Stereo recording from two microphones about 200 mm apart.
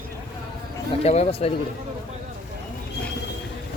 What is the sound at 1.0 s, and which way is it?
Speech, 30° left (ahead or behind).